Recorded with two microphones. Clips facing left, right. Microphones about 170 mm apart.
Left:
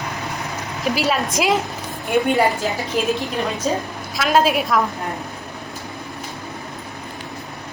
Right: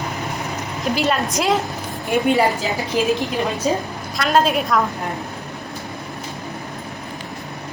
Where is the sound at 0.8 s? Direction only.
Centre (ahead or behind).